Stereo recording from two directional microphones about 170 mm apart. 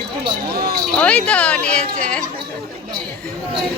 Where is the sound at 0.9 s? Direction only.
5° left (ahead or behind).